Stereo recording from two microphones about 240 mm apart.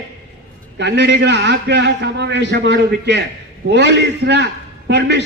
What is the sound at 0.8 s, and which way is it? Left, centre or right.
A man's voice, right.